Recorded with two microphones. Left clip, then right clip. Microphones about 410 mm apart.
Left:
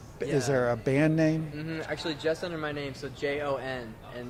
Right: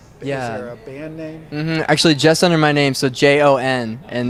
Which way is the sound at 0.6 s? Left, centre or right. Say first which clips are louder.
Left 5 dB; left.